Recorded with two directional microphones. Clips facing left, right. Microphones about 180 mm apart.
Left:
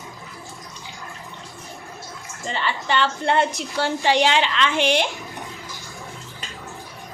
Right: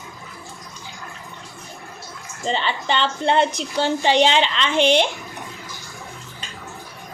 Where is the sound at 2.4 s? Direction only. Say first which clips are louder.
Right 3 dB; 25° right (ahead or behind).